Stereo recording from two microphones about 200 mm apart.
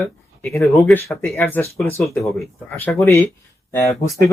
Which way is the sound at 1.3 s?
10° left (ahead or behind).